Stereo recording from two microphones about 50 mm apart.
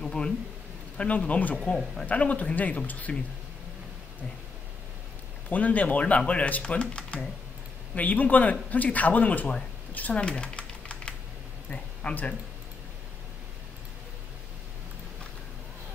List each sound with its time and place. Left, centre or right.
0.0 s a sound: centre
0.9 s speech: left
1.6 s speech: centre
2.0 s speech: left
5.5 s speech: left
10.2 s typing: centre
11.7 s a sound: left